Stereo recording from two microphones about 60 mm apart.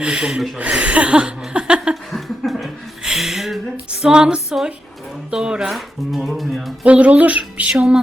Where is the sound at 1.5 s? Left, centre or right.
Centre.